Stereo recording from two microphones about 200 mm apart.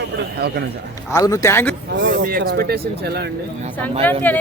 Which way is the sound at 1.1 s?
15° left (ahead or behind).